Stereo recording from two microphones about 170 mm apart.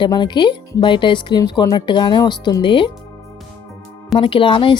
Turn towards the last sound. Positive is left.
turn(degrees=30)  # may be behind; listen again after turning